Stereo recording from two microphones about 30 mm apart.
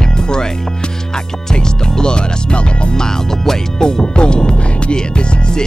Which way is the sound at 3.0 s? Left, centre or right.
Centre.